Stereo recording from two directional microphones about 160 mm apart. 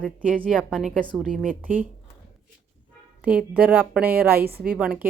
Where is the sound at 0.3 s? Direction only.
5° left (ahead or behind).